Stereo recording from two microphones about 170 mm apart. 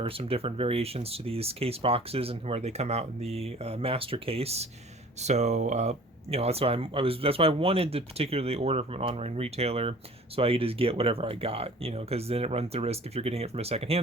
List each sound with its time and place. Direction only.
0.0 s speech: 35° right (ahead or behind)